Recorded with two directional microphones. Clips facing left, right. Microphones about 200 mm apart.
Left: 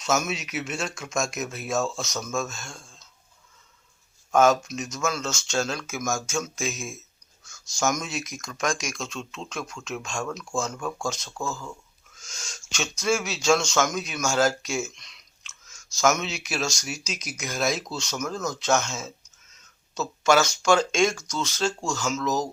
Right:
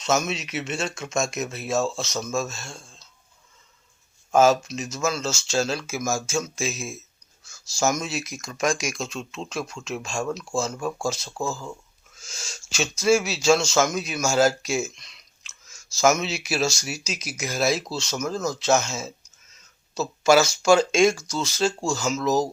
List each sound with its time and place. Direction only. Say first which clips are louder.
0.0 s speech: right 2 dB; centre (ahead or behind)
2.6 s a sound: right 2 dB; 30° right (ahead or behind)
4.4 s speech: right 2 dB; 5° right (ahead or behind)